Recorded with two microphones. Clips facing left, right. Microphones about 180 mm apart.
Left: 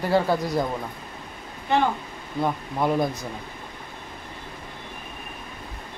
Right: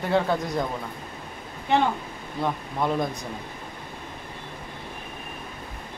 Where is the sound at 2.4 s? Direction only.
5° left (ahead or behind).